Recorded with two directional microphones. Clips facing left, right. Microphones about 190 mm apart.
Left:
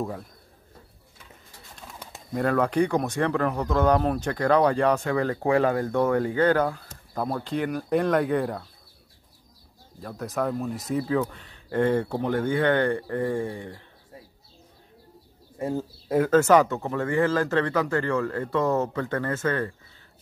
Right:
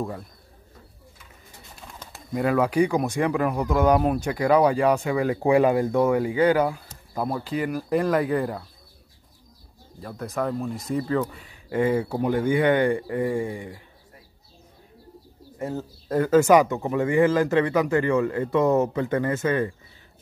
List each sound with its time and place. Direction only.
0.0 s speech: centre (ahead or behind)
2.3 s speech: 5° right (ahead or behind)
10.0 s speech: centre (ahead or behind)
15.7 s speech: 10° left (ahead or behind)
16.3 s speech: 10° right (ahead or behind)